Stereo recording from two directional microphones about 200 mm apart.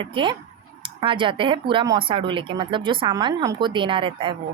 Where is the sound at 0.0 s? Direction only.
25° right (ahead or behind).